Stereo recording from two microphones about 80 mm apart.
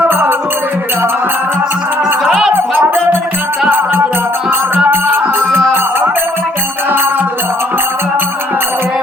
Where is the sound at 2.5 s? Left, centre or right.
Right.